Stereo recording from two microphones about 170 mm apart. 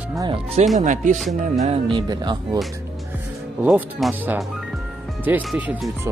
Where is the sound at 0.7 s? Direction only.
45° right (ahead or behind).